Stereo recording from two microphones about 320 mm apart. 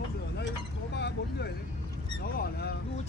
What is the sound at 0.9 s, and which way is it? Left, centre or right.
Speech, left.